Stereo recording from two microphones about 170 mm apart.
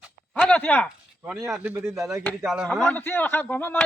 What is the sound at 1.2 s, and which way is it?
Speech, 10° right (ahead or behind).